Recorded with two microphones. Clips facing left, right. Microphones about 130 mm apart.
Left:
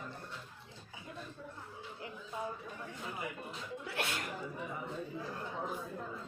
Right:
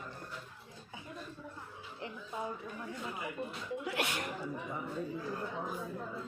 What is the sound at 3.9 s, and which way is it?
Speech, 20° right (ahead or behind).